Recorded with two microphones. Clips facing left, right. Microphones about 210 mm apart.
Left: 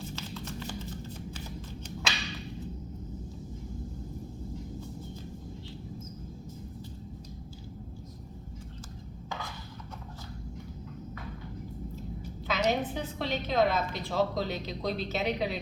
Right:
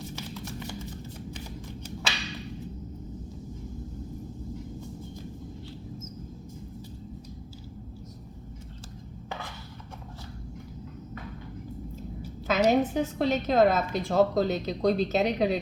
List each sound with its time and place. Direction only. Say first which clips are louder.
12.5 s a woman's voice: right 6 dB; 40° right (ahead or behind)